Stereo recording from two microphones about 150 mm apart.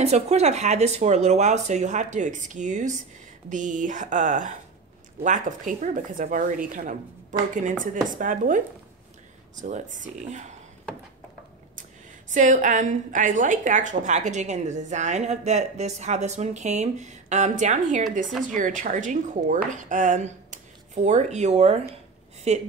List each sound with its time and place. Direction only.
0.0 s a woman's voice: 45° right (ahead or behind)
12.4 s a woman's voice: 60° right (ahead or behind)